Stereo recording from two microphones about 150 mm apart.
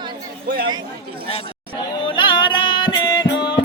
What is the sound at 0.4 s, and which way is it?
Speech, 90° right.